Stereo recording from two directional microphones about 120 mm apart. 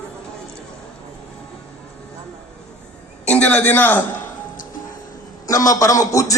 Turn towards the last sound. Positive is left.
turn(degrees=25)  # may be behind; listen again after turning